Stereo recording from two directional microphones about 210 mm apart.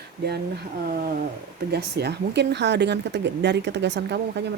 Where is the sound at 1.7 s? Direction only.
55° right (ahead or behind).